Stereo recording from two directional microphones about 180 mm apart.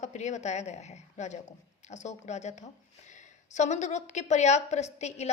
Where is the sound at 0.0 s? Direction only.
40° left (ahead or behind).